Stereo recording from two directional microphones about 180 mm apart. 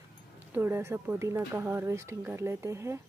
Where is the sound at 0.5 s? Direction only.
10° right (ahead or behind).